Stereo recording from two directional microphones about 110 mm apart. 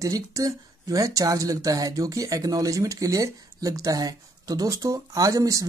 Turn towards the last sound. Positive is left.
turn(degrees=-30)  # may be behind; listen again after turning